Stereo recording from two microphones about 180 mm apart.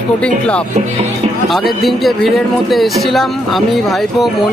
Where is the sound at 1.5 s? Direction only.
Centre (ahead or behind).